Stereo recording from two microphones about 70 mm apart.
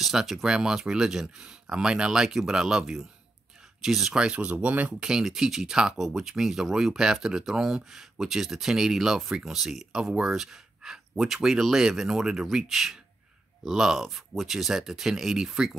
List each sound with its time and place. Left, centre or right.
0.0 s speech: centre; by 4.9 s right
5.0 s speech: centre